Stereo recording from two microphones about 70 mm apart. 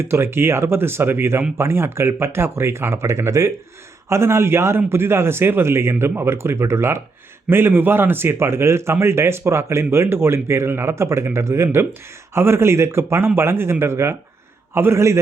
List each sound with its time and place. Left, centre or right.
0.0 s a man's voice: right